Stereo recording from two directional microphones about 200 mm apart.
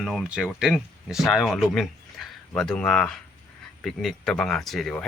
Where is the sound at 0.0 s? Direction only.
Centre (ahead or behind).